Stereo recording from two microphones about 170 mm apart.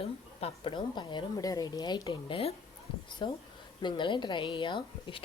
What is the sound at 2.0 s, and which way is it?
A woman's voice, 35° left (ahead or behind).